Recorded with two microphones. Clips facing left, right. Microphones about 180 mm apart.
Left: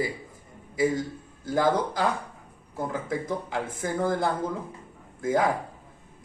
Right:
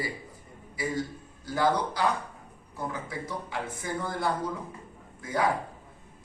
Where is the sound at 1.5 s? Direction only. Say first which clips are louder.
Left 2 dB; 50° left (ahead or behind).